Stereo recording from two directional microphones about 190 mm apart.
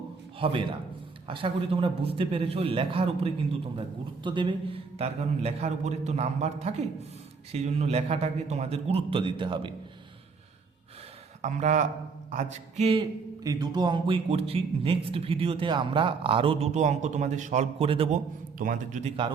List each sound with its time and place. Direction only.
0.3 s a man's voice: 30° right (ahead or behind)
11.4 s a man's voice: 40° right (ahead or behind)
18.6 s a man's voice: 45° right (ahead or behind)